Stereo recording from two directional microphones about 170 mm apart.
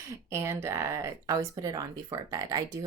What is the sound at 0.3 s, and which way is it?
Speech, 15° right (ahead or behind).